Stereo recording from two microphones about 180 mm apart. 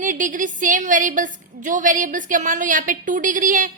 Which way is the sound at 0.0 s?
45° right (ahead or behind).